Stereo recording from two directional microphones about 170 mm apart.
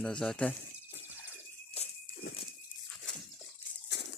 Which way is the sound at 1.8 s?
35° left (ahead or behind).